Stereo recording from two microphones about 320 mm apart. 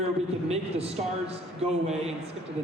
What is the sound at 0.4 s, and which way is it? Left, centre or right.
Speech, centre.